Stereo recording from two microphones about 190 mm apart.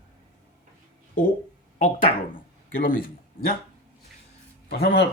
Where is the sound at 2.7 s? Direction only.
45° left (ahead or behind).